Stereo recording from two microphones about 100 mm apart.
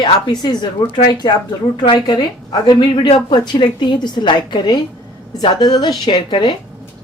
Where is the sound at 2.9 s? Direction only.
55° left (ahead or behind).